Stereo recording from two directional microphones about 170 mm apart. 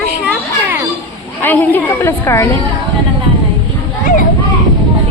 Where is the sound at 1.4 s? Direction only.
10° left (ahead or behind).